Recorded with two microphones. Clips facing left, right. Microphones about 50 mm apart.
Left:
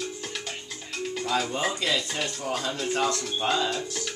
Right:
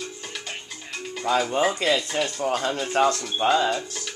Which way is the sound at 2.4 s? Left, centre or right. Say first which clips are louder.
Right 5 dB; right.